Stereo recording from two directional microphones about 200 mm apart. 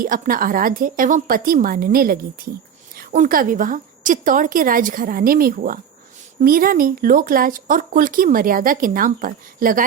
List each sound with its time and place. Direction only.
0.0 s speech: 45° right (ahead or behind)